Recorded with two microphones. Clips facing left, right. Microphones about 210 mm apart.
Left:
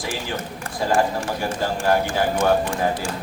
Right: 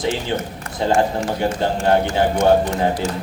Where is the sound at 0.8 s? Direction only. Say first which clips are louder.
Right 3 dB; 25° right (ahead or behind).